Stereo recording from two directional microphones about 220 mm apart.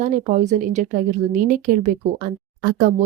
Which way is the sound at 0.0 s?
35° right (ahead or behind).